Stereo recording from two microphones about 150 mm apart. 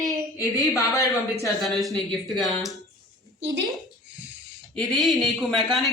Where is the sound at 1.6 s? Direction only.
Centre (ahead or behind).